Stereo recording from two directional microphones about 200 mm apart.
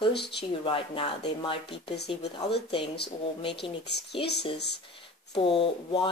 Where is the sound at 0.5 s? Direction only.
25° left (ahead or behind).